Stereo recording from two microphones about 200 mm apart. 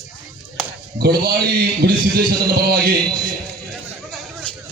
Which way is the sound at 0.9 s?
50° right (ahead or behind).